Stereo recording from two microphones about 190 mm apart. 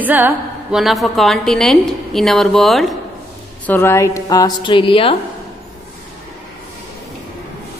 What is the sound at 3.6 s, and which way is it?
A woman's voice, 10° left (ahead or behind).